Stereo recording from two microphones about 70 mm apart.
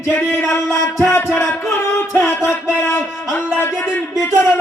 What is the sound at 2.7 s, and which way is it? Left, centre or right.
Speech, left.